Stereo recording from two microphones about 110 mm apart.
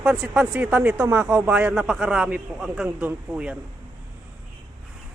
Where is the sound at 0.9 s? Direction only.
25° right (ahead or behind).